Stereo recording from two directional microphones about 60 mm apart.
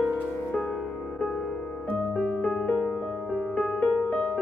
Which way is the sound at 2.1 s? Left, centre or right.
Centre.